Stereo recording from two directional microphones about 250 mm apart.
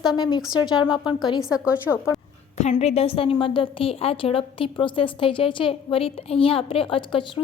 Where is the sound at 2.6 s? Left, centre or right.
Left.